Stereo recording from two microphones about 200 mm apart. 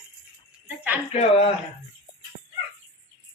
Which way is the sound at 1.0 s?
30° left (ahead or behind).